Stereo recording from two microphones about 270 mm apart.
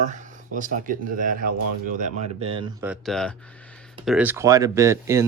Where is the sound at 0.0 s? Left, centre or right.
Right.